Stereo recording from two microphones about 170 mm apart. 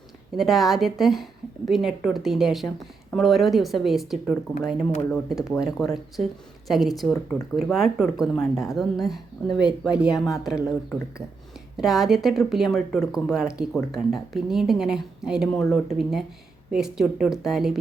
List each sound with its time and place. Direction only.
0.3 s speech: centre (ahead or behind)
11.8 s speech: centre (ahead or behind)